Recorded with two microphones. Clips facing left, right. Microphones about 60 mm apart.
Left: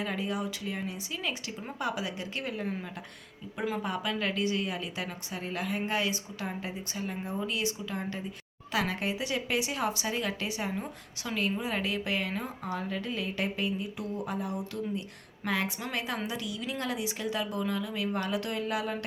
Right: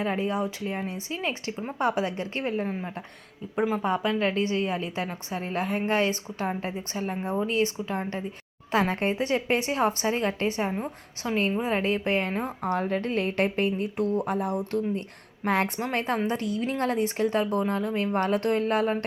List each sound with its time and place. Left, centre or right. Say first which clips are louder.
0.0 s a woman's voice: right 6 dB; right